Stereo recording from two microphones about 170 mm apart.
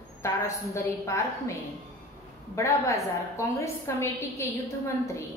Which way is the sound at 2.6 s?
15° left (ahead or behind).